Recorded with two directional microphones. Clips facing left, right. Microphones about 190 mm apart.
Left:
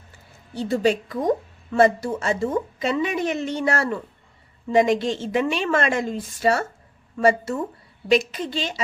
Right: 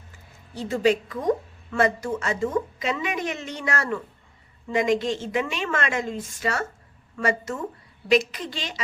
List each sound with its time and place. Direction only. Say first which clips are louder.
0.5 s a woman's voice: left 1 dB; 30° left (ahead or behind)